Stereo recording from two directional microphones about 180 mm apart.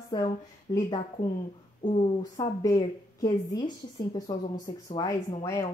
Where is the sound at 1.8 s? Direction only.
25° left (ahead or behind).